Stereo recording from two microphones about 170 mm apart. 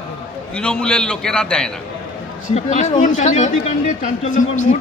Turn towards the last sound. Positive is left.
turn(degrees=50)  # may be behind; listen again after turning